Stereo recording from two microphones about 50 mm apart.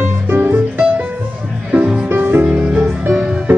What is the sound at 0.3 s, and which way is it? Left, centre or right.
Music, right.